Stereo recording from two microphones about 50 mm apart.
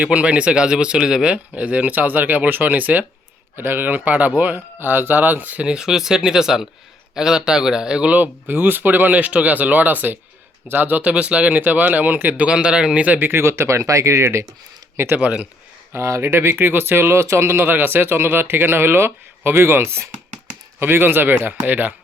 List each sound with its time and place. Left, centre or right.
0.0 s speech: right
3.6 s speech: right
5.6 s speech: centre; by 12.5 s right
12.5 s speech: centre
13.1 s speech: right
13.4 s speech: right
15.1 s speech: right
15.9 s speech: right
16.6 s speech: right
17.7 s speech: right